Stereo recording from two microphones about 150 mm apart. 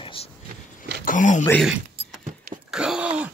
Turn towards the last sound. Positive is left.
turn(degrees=-10)  # may be behind; listen again after turning